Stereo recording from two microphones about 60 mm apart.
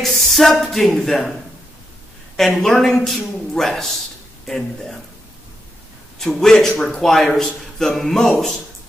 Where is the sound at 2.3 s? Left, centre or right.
Centre.